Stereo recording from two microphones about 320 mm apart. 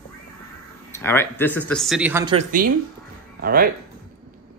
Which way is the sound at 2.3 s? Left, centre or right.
Right.